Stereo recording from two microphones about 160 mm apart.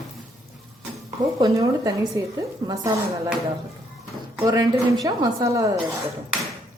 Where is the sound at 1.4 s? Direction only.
20° right (ahead or behind).